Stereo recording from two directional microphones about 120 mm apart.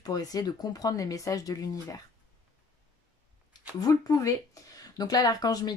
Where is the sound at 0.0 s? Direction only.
30° left (ahead or behind).